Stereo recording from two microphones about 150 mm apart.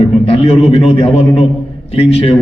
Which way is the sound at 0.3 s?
40° left (ahead or behind).